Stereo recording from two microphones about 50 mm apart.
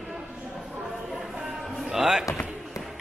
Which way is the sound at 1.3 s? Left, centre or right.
Centre.